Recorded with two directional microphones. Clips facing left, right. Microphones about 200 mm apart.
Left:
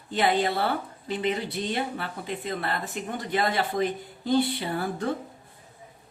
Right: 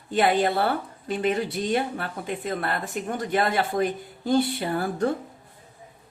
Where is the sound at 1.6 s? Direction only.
45° right (ahead or behind).